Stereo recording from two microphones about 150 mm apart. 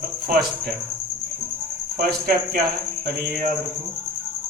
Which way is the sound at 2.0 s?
75° right (ahead or behind).